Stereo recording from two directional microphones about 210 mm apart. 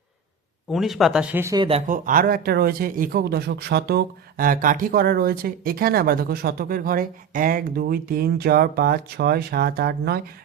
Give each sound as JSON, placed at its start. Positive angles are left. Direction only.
{"t": 0.7, "sound": "speech", "side_deg": 0}
{"t": 1.9, "sound": "speech", "side_deg": -40}